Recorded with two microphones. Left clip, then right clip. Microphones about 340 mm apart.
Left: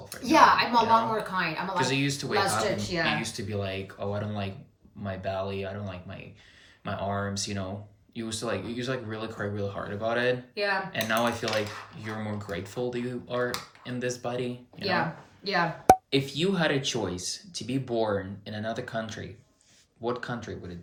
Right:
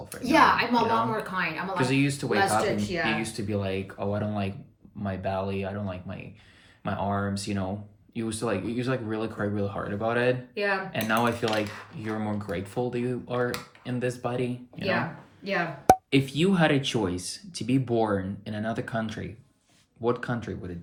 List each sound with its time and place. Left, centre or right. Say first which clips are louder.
0.2 s a woman's voice: left 1 dB; centre
1.1 s speech: even; centre
1.7 s speech: right 2 dB; centre
10.5 s speech: right 1 dB; centre
10.9 s speech: right 1 dB; centre
15.4 s speech: left 1 dB; centre
16.0 s speech: right 2 dB; centre